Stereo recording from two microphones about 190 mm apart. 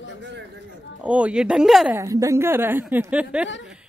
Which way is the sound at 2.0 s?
15° right (ahead or behind).